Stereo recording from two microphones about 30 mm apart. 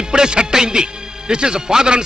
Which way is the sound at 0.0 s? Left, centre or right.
Right.